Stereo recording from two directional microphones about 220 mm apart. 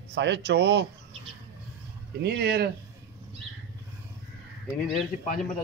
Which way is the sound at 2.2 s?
50° right (ahead or behind).